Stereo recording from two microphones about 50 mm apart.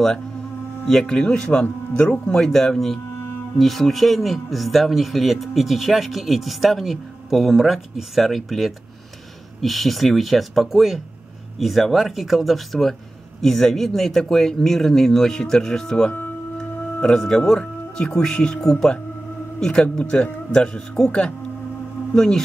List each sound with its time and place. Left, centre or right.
0.8 s speech: centre
2.3 s speech: centre